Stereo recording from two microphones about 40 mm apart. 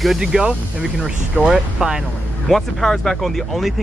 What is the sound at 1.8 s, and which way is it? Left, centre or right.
Speech, right.